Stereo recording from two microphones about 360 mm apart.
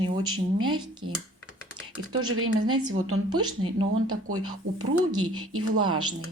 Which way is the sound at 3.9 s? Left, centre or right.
Right.